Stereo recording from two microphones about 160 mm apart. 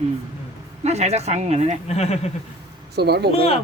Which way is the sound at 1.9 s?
40° left (ahead or behind).